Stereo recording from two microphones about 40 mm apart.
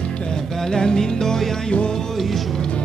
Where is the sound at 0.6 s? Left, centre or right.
Centre.